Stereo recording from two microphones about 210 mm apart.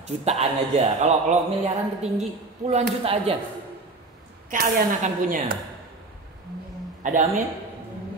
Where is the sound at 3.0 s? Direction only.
25° right (ahead or behind).